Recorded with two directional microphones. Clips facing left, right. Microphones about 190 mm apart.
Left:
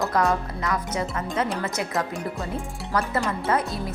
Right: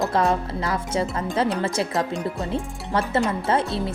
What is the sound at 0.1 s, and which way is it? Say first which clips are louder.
A woman's voice: right 2 dB; 30° right (ahead or behind).